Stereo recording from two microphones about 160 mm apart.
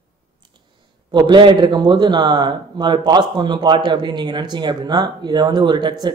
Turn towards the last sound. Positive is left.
turn(degrees=-30)  # may be behind; listen again after turning